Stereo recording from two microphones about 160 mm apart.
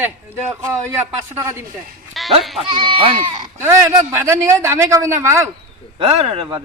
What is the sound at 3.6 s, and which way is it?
A man's voice, 15° right (ahead or behind).